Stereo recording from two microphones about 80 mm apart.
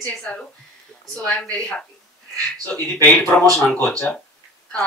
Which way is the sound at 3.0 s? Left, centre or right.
Centre.